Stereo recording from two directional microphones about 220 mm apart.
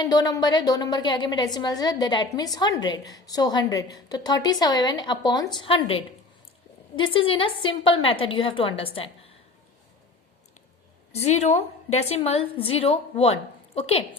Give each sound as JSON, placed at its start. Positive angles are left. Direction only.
{"t": 0.0, "sound": "a woman's voice", "side_deg": 20}
{"t": 11.2, "sound": "a woman's voice", "side_deg": 30}